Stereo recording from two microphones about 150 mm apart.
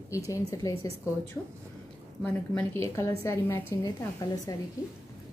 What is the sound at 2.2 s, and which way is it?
A woman's voice, 5° left (ahead or behind).